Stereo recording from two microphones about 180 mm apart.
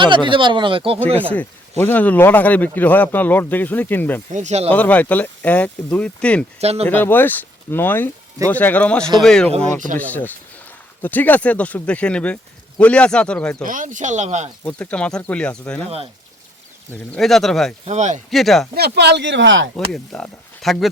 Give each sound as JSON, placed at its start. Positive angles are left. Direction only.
{"t": 0.0, "sound": "speech", "side_deg": -25}
{"t": 1.3, "sound": "speech", "side_deg": 10}
{"t": 4.3, "sound": "speech", "side_deg": -40}
{"t": 4.7, "sound": "speech", "side_deg": 10}
{"t": 6.6, "sound": "speech", "side_deg": -35}
{"t": 6.8, "sound": "speech", "side_deg": 10}
{"t": 13.7, "sound": "speech", "side_deg": -45}
{"t": 14.6, "sound": "speech", "side_deg": 5}
{"t": 17.2, "sound": "speech", "side_deg": 0}
{"t": 17.8, "sound": "speech", "side_deg": -40}
{"t": 18.3, "sound": "speech", "side_deg": 0}
{"t": 18.7, "sound": "speech", "side_deg": -60}
{"t": 19.9, "sound": "speech", "side_deg": 0}